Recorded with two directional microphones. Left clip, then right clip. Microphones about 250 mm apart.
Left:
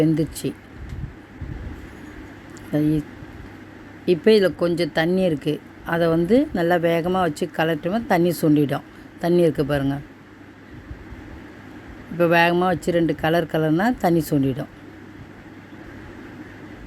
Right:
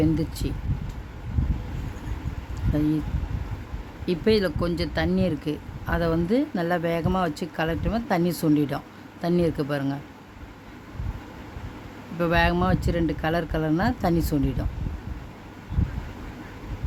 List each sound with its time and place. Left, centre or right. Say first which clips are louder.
0.0 s speech: left 4 dB; centre
4.0 s speech: left 6 dB; centre
12.2 s speech: left 6 dB; centre